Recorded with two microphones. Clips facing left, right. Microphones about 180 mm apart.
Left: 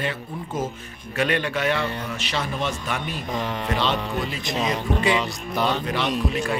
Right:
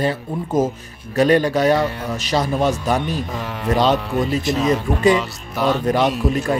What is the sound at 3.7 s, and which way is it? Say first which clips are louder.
Speech: right 9 dB; 40° right (ahead or behind).